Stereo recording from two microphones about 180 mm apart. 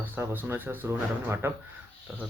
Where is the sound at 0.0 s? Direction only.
10° right (ahead or behind).